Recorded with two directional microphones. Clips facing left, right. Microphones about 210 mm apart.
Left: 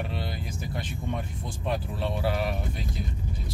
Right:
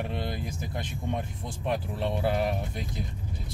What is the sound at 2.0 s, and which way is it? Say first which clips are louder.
Speech: right 2 dB; 20° right (ahead or behind).